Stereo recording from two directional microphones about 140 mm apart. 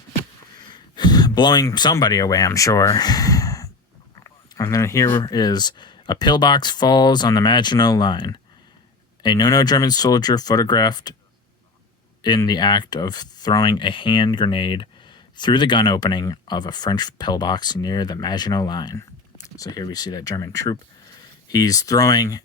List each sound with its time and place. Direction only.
0.7 s speech: 30° left (ahead or behind)
4.1 s a sound: 25° left (ahead or behind)
5.1 s speech: 30° left (ahead or behind)
12.2 s speech: 30° left (ahead or behind)